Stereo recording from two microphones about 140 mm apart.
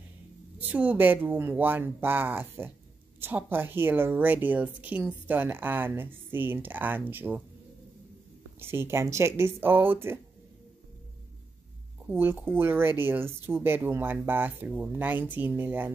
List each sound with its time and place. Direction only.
0.6 s a woman's voice: 10° right (ahead or behind)
8.5 s a woman's voice: 15° right (ahead or behind)
12.1 s a woman's voice: 15° right (ahead or behind)